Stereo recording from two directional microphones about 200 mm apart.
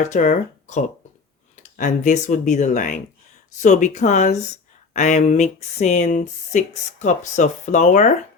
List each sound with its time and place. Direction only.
0.0 s speech: 40° left (ahead or behind)